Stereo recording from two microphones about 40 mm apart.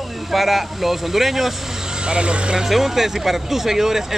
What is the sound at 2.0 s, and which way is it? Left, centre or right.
Speech, right.